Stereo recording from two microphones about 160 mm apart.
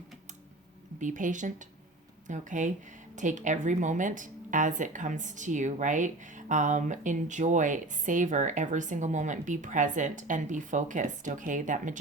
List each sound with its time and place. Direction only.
0.9 s a woman's voice: 50° right (ahead or behind)